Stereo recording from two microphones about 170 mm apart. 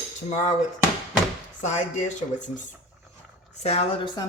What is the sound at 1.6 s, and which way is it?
Speech, 45° left (ahead or behind).